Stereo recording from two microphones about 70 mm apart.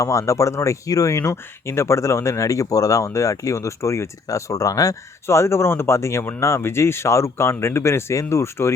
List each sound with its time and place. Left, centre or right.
0.0 s speech: left
5.2 s speech: left